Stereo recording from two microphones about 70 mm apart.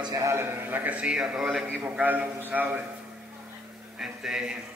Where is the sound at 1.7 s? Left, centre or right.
Right.